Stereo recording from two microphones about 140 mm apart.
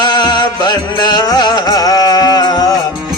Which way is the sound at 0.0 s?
30° left (ahead or behind).